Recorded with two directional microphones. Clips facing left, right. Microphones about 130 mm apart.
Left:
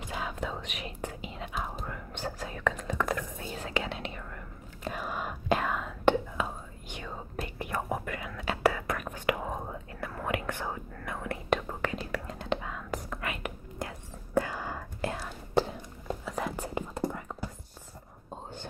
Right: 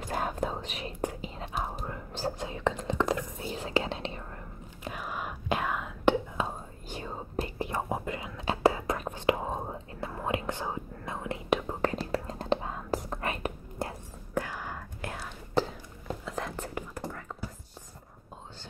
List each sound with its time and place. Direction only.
0.1 s whispering: 45° right (ahead or behind)
4.8 s whispering: 5° right (ahead or behind)
6.3 s whispering: 30° right (ahead or behind)
11.8 s whispering: 35° right (ahead or behind)
16.3 s whispering: 5° left (ahead or behind)
16.6 s whispering: 20° left (ahead or behind)